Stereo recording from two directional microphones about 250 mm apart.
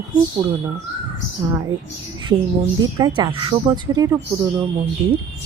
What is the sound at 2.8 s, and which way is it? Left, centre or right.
A woman's voice, centre.